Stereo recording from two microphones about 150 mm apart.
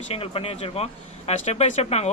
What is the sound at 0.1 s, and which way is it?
A man's voice, 40° left (ahead or behind).